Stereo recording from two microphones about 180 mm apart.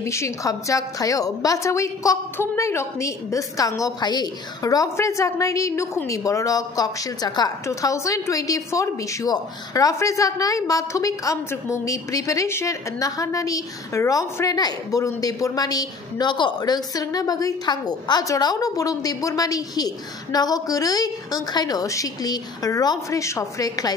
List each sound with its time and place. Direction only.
0.0 s a woman's voice: 15° left (ahead or behind)